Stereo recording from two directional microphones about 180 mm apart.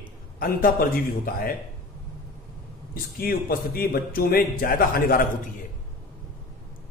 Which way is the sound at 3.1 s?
55° left (ahead or behind).